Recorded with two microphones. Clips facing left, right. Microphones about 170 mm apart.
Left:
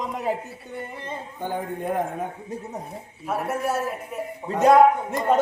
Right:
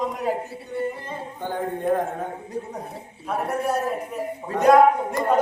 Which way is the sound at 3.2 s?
5° left (ahead or behind).